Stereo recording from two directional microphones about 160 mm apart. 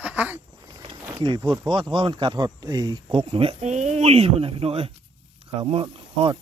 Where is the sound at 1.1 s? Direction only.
30° right (ahead or behind).